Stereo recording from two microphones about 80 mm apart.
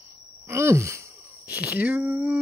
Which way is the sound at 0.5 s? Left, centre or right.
Right.